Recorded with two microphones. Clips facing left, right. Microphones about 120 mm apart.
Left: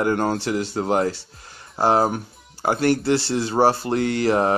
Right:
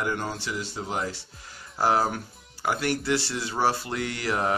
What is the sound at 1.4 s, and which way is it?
Speech, 35° left (ahead or behind).